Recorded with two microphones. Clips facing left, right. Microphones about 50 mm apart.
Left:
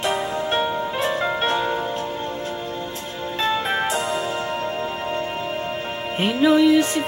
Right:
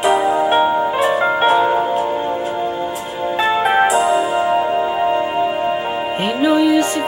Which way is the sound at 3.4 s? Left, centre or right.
Centre.